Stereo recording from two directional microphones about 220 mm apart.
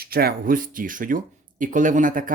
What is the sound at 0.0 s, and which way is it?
Speech, 45° right (ahead or behind).